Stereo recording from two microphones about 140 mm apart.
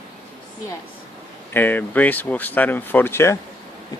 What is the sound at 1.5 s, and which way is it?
Speech, 15° left (ahead or behind).